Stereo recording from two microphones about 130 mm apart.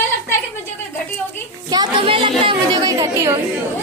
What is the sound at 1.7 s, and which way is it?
Speech, 30° right (ahead or behind).